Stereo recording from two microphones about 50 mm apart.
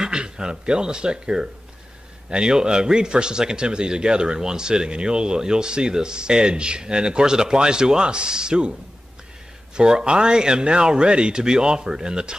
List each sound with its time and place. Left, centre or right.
0.0 s speech: centre
9.8 s speech: centre